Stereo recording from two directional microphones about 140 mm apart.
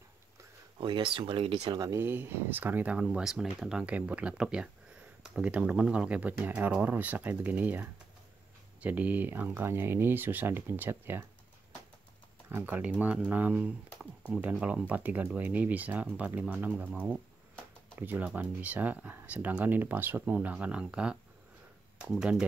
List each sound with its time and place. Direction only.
0.7 s speech: 35° right (ahead or behind)
1.8 s speech: 20° right (ahead or behind)
12.4 s speech: 15° right (ahead or behind)